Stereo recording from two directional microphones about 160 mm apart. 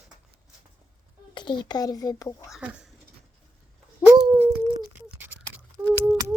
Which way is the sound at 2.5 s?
5° right (ahead or behind).